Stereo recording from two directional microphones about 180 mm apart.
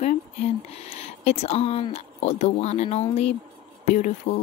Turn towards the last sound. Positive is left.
turn(degrees=45)  # may be behind; listen again after turning